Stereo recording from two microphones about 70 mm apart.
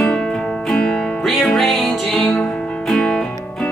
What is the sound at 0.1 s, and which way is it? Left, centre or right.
Music, centre.